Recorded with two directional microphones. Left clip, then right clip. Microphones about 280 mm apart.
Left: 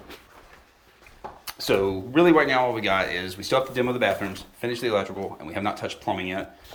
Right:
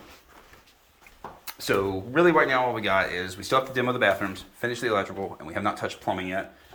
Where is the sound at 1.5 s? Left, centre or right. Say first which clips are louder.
Left 2 dB; centre.